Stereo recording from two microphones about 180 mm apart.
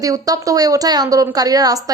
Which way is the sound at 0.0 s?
20° right (ahead or behind).